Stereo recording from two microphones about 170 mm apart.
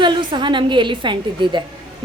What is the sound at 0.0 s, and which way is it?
A woman's voice, 25° right (ahead or behind).